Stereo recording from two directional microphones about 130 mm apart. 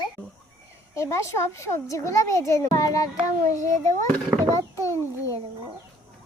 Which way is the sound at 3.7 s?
70° right (ahead or behind).